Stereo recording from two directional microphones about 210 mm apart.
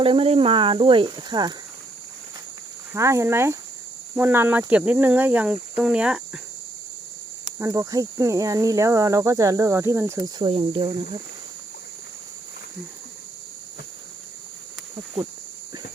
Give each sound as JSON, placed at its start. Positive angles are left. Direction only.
{"t": 0.0, "sound": "speech", "side_deg": -25}
{"t": 2.9, "sound": "speech", "side_deg": -15}
{"t": 5.7, "sound": "cricket", "side_deg": -5}
{"t": 7.6, "sound": "speech", "side_deg": -15}